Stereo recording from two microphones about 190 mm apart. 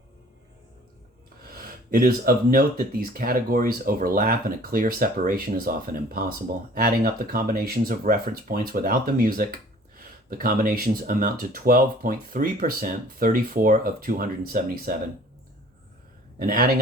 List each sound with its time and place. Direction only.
1.5 s speech: 50° right (ahead or behind)
16.4 s speech: 50° right (ahead or behind)